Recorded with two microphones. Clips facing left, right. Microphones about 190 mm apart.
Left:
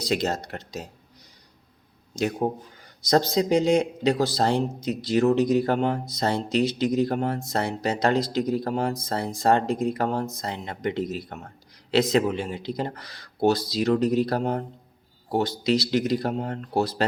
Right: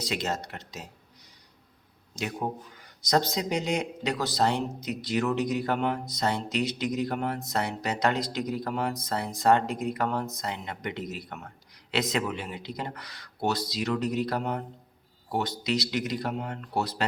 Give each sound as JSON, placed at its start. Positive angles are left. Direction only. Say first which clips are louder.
{"t": 0.0, "sound": "speech", "louder": "left 5 dB", "side_deg": 35}
{"t": 2.4, "sound": "speech", "louder": "left 6 dB", "side_deg": 35}